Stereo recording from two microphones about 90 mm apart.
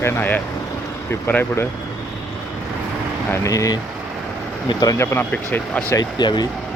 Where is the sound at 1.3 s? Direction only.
25° left (ahead or behind).